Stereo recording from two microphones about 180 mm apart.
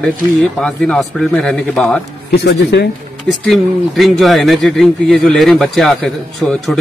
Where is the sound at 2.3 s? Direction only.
65° left (ahead or behind).